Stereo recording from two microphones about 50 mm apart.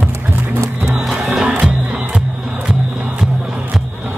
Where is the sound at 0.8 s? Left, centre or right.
Centre.